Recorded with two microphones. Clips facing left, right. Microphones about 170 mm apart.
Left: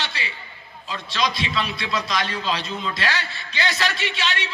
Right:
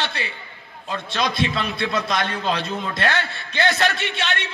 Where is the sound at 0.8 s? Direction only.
55° right (ahead or behind).